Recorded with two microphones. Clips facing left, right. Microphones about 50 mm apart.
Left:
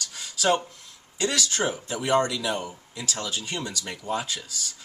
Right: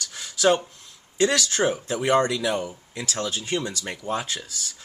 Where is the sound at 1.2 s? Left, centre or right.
Right.